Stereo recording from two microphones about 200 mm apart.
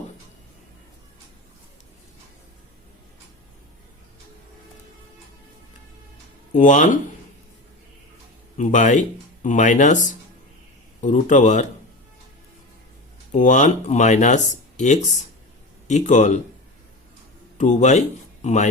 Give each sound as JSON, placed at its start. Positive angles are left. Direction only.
{"t": 6.5, "sound": "speech", "side_deg": 40}
{"t": 8.5, "sound": "speech", "side_deg": 40}
{"t": 13.3, "sound": "speech", "side_deg": 40}
{"t": 17.6, "sound": "speech", "side_deg": 35}